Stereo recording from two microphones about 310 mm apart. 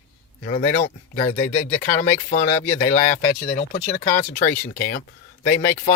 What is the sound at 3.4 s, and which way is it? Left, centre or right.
Speech, left.